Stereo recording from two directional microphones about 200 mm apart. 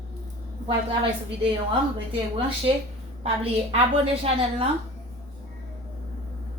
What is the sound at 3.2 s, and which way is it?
Speech, 30° right (ahead or behind).